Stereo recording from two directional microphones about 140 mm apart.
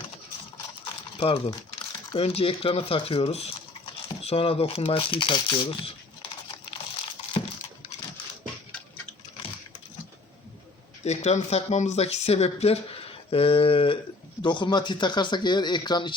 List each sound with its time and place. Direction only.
1.2 s speech: 35° left (ahead or behind)
11.0 s speech: 50° left (ahead or behind); by 16.1 s 30° left (ahead or behind)